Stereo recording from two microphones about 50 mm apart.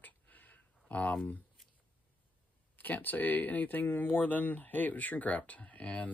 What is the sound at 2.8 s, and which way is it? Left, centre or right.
Speech, left.